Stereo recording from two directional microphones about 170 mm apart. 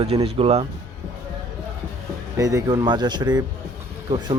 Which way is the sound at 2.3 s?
20° right (ahead or behind).